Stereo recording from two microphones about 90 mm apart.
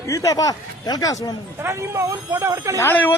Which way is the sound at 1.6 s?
35° right (ahead or behind).